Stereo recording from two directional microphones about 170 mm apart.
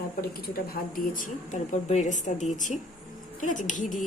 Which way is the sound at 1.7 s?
45° left (ahead or behind).